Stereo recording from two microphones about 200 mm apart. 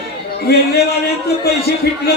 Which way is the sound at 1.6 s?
50° left (ahead or behind).